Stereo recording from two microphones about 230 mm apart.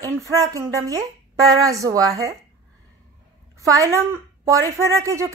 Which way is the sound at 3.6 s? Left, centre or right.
Centre.